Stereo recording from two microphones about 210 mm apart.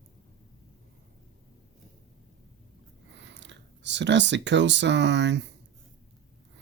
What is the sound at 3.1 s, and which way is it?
Speech, 55° right (ahead or behind).